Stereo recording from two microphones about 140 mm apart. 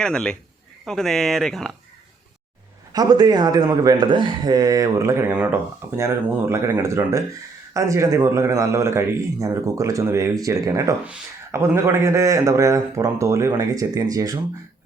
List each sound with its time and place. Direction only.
0.0 s speech: 5° left (ahead or behind)
2.9 s speech: 30° right (ahead or behind)
5.3 s speech: 10° right (ahead or behind)